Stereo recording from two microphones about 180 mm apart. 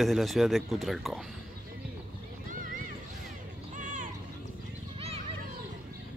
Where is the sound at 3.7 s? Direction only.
45° right (ahead or behind).